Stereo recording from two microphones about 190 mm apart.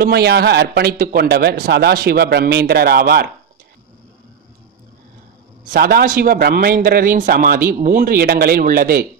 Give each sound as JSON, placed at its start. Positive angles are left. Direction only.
{"t": 0.0, "sound": "a man's voice", "side_deg": -55}
{"t": 5.7, "sound": "a man's voice", "side_deg": -55}